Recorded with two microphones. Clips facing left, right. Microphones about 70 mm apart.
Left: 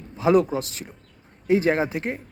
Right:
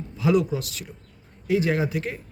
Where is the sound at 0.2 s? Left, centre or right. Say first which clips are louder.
Left 3 dB; left.